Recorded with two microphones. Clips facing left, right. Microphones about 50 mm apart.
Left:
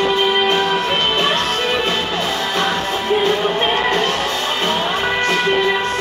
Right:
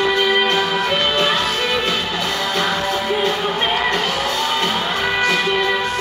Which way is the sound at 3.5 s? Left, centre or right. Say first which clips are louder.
Left 2 dB; centre.